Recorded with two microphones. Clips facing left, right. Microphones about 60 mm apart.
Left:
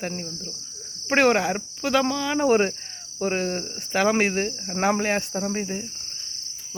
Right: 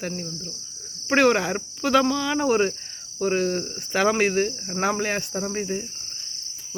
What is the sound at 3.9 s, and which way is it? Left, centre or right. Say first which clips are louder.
Speech: right 1 dB; centre.